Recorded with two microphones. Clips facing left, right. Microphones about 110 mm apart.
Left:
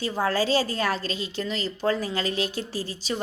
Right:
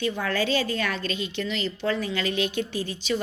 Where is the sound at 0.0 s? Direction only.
35° left (ahead or behind).